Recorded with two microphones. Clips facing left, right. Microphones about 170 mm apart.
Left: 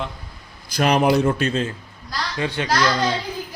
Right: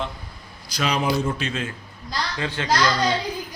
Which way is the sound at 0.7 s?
55° left (ahead or behind).